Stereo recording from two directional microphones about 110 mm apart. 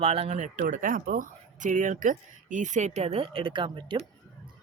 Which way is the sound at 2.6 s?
90° right.